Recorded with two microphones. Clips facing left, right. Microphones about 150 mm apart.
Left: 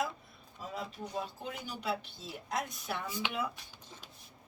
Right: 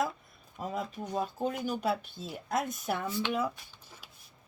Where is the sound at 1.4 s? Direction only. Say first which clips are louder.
Right 10 dB; 45° right (ahead or behind).